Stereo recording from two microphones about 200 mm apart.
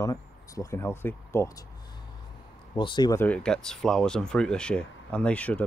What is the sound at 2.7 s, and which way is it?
Speech, 25° left (ahead or behind).